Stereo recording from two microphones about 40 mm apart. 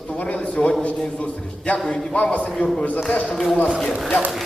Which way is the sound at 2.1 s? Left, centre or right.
Left.